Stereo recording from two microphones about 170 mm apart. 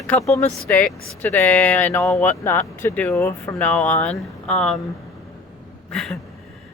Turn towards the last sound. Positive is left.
turn(degrees=0)  # may be behind; listen again after turning